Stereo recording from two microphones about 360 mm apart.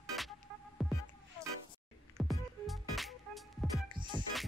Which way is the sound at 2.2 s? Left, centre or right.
Centre.